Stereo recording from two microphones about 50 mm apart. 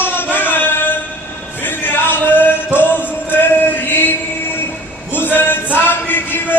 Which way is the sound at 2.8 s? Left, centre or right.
Left.